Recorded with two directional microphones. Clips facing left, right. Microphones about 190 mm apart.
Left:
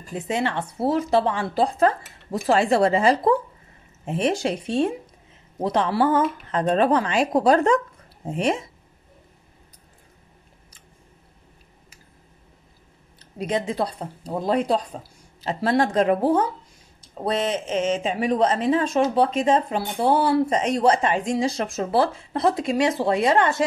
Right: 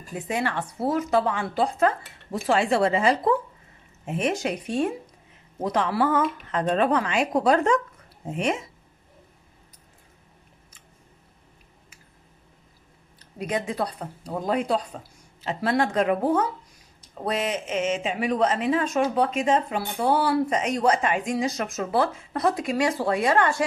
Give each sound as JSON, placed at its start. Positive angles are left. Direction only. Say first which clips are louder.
{"t": 0.1, "sound": "speech", "louder": "left 2 dB", "side_deg": 25}
{"t": 13.4, "sound": "speech", "louder": "left 3 dB", "side_deg": 25}